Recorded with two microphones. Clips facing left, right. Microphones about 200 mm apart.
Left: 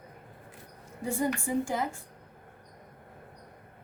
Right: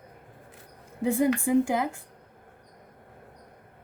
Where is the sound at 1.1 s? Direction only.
90° right.